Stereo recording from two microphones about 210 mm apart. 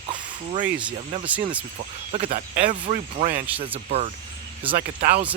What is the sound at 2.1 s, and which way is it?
Speech, 35° right (ahead or behind).